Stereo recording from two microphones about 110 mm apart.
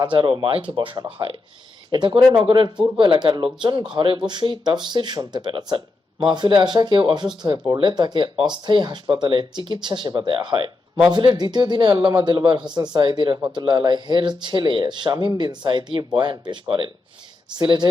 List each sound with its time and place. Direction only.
0.0 s a man's voice: 45° right (ahead or behind)